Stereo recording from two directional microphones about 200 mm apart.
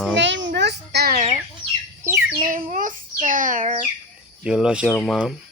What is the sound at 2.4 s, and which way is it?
Child singing, 40° right (ahead or behind).